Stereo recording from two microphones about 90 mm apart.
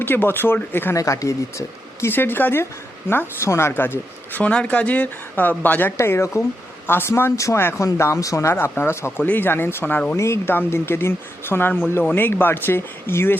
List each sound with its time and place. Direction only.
0.0 s speech: 20° left (ahead or behind)
0.9 s speech: 35° left (ahead or behind); by 5.9 s 20° left (ahead or behind)
6.0 s speech: 30° left (ahead or behind)
10.2 s speech: 30° left (ahead or behind)